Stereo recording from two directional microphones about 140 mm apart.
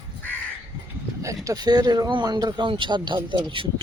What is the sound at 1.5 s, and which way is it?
Speech, 30° right (ahead or behind).